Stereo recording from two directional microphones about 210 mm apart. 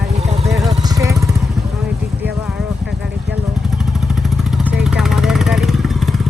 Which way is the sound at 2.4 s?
Centre (ahead or behind).